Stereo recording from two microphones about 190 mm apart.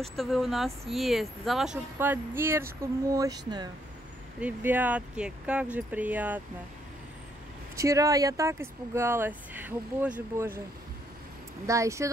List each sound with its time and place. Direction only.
0.0 s speech: centre (ahead or behind); by 3.7 s 20° right (ahead or behind)
4.4 s speech: 10° right (ahead or behind)
7.7 s speech: 15° right (ahead or behind)
11.6 s speech: 15° right (ahead or behind)